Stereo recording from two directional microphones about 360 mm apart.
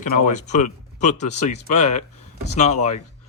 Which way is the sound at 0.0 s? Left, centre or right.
Left.